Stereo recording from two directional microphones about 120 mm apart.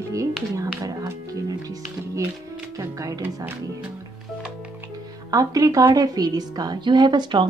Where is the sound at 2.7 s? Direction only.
30° right (ahead or behind).